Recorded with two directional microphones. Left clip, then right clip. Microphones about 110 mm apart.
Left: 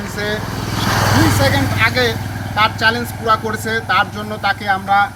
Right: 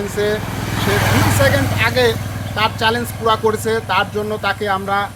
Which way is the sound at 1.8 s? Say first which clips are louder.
Even; 30° right (ahead or behind).